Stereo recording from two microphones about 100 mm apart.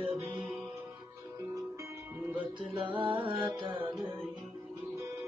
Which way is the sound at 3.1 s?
60° right (ahead or behind).